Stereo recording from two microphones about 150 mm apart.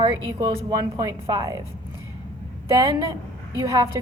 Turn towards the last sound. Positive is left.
turn(degrees=-25)  # may be behind; listen again after turning